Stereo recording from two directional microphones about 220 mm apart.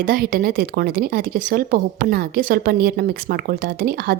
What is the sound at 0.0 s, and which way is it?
A woman's voice, 40° right (ahead or behind).